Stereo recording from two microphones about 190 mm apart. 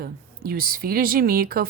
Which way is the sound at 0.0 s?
50° right (ahead or behind).